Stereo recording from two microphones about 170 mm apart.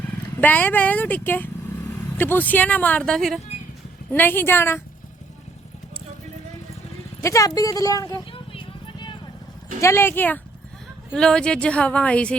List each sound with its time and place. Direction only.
0.3 s speech: 10° left (ahead or behind)
7.2 s a sound: 20° left (ahead or behind)
9.8 s speech: 15° left (ahead or behind)